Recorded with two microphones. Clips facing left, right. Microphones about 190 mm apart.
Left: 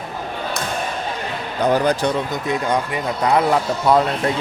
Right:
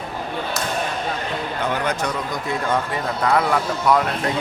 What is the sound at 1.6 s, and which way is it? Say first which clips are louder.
Speech: left 8 dB; 35° left (ahead or behind).